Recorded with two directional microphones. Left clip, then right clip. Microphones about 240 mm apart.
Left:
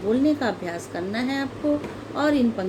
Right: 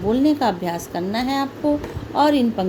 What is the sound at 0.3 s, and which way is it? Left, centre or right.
A woman's voice, right.